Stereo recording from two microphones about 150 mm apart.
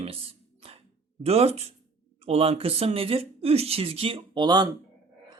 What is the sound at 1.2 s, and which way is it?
Speech, 45° right (ahead or behind).